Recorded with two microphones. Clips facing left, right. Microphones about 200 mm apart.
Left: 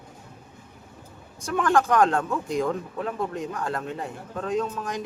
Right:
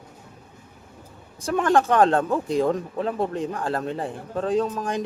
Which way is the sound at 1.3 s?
30° right (ahead or behind).